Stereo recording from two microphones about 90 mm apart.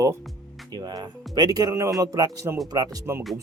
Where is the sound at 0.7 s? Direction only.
45° right (ahead or behind).